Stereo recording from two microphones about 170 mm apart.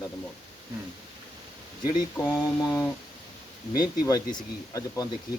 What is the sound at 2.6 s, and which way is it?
A man's voice, 15° left (ahead or behind).